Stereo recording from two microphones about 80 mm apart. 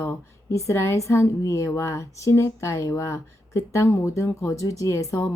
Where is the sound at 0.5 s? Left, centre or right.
Left.